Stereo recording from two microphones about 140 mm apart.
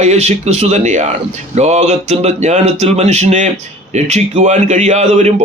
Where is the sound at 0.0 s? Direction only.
50° right (ahead or behind).